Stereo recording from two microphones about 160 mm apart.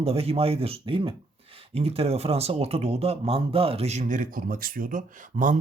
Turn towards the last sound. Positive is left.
turn(degrees=-55)  # may be behind; listen again after turning